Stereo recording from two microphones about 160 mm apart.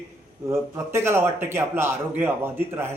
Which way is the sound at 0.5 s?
15° right (ahead or behind).